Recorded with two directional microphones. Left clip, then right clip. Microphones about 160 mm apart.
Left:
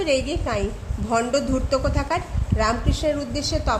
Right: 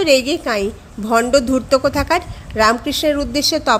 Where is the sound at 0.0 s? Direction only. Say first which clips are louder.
Right 8 dB; 35° right (ahead or behind).